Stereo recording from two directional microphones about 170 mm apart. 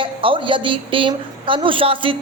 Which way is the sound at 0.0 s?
30° right (ahead or behind).